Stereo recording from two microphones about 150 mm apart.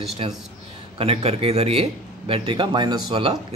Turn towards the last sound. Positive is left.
turn(degrees=-30)  # may be behind; listen again after turning